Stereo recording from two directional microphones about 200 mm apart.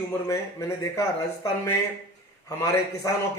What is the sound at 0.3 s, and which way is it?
Speech, 15° left (ahead or behind).